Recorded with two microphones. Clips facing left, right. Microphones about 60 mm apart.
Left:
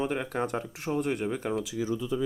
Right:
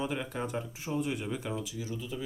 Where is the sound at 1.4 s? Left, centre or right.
Left.